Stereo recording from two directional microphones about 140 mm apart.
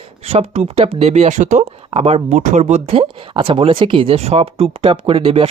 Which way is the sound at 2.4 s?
60° right (ahead or behind).